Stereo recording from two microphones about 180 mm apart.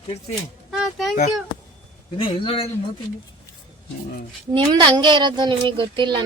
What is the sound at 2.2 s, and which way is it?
Speech, 30° left (ahead or behind).